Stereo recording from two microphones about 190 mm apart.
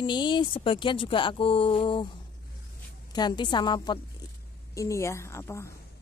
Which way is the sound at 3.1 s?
20° left (ahead or behind).